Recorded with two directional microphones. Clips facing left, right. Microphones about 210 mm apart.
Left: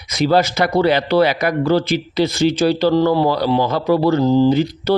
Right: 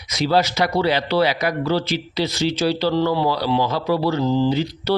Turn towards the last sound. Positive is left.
turn(degrees=50)  # may be behind; listen again after turning